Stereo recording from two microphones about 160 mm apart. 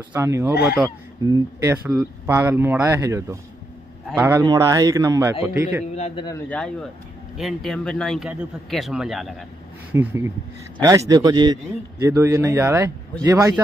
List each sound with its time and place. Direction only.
0.1 s speech: 15° right (ahead or behind)
1.2 s a man's voice: 20° right (ahead or behind)
5.9 s a man's voice: 40° left (ahead or behind)
6.5 s a man's voice: 5° left (ahead or behind)
9.9 s a man's voice: 15° right (ahead or behind)